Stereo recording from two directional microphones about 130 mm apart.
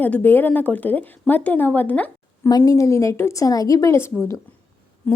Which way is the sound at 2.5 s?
30° left (ahead or behind).